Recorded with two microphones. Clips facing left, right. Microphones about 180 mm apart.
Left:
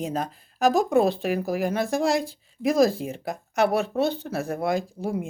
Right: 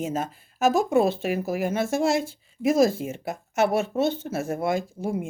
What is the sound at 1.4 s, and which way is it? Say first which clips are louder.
Speech: even; 35° left (ahead or behind).